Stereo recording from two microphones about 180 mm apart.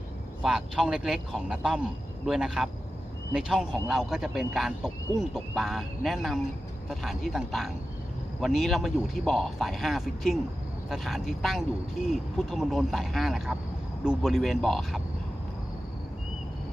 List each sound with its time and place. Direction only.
0.4 s a man's voice: 5° right (ahead or behind)